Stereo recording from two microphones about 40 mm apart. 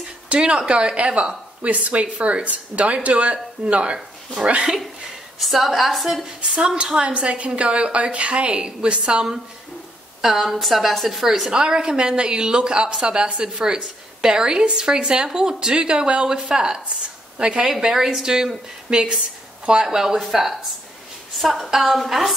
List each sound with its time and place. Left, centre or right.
0.3 s a woman's voice: right
5.4 s a woman's voice: centre
6.5 s a woman's voice: right
10.2 s a woman's voice: centre
20.2 s a woman's voice: centre